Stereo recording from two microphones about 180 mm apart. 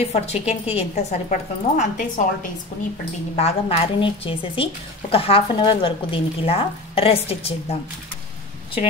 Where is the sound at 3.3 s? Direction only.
35° left (ahead or behind).